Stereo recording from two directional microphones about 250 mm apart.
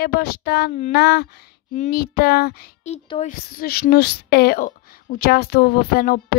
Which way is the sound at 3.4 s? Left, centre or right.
Left.